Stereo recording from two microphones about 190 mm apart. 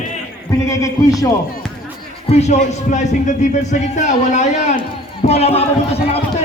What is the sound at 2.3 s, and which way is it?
A man's voice, 35° left (ahead or behind).